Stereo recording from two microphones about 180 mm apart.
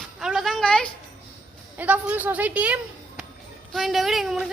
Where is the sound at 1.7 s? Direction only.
10° right (ahead or behind).